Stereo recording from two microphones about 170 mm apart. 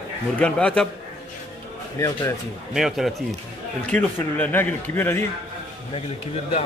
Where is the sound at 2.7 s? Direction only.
Centre (ahead or behind).